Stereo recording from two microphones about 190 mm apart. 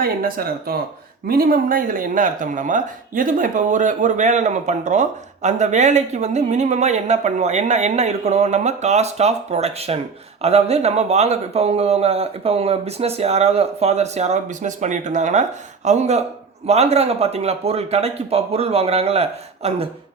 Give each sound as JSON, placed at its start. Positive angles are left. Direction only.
{"t": 0.0, "sound": "speech", "side_deg": -50}